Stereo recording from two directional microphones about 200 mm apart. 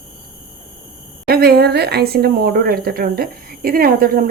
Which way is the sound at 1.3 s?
50° right (ahead or behind).